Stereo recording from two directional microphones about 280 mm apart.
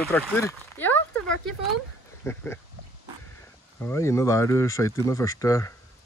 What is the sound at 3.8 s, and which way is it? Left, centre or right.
Speech, centre.